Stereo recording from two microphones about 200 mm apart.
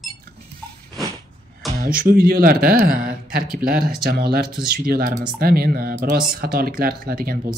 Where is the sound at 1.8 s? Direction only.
45° right (ahead or behind).